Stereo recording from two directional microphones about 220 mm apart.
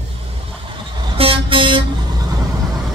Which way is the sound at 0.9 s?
25° right (ahead or behind).